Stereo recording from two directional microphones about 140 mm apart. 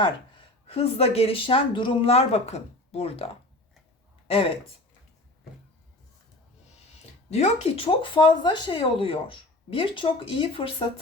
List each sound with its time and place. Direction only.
0.0 s speech: 40° left (ahead or behind)
7.3 s speech: 50° left (ahead or behind)